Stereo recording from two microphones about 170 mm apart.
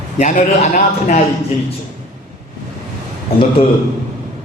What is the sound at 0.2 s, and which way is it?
A man's voice, 45° left (ahead or behind).